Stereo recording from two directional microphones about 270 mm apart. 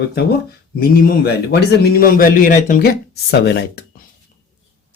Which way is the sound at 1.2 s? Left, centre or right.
Left.